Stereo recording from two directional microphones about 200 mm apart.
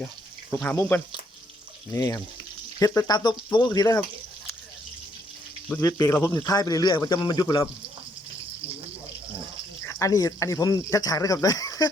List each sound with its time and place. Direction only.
0.6 s speech: 10° left (ahead or behind)
5.6 s speech: 10° left (ahead or behind)
9.8 s speech: 15° left (ahead or behind)